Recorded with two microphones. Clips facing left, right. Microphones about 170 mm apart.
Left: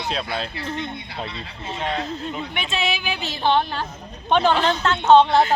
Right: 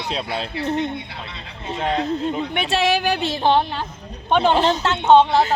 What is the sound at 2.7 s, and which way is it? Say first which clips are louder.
Speech: right 7 dB; 90° right.